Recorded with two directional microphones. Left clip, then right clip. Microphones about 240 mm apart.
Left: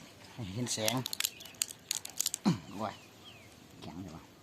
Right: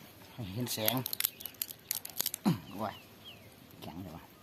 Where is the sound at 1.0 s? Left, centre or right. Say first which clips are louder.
Left 2 dB; centre.